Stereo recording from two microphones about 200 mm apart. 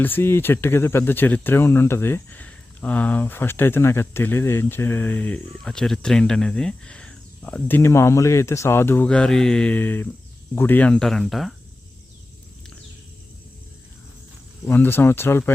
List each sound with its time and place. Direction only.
0.0 s speech: 10° left (ahead or behind)
14.7 s speech: 10° left (ahead or behind)